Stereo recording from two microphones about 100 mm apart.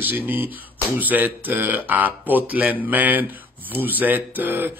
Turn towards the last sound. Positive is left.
turn(degrees=-20)  # may be behind; listen again after turning